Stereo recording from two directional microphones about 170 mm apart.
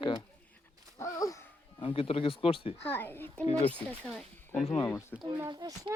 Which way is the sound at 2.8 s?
10° left (ahead or behind).